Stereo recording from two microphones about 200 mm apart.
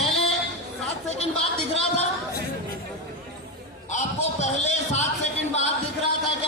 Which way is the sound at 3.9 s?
35° left (ahead or behind).